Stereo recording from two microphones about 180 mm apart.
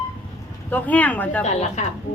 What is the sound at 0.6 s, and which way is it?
Speech, 10° left (ahead or behind).